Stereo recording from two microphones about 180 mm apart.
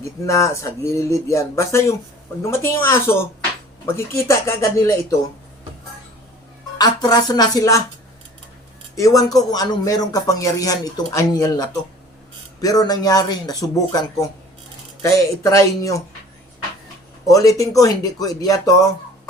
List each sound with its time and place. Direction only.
0.0 s speech: 15° left (ahead or behind)
6.7 s a man's voice: 20° left (ahead or behind)
9.0 s a man's voice: 20° left (ahead or behind)
17.2 s a man's voice: 20° left (ahead or behind)